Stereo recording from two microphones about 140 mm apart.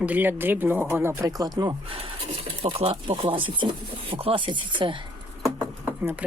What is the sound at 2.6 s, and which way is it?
Speech, 45° right (ahead or behind).